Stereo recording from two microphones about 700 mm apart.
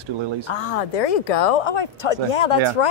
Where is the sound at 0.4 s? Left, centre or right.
Left.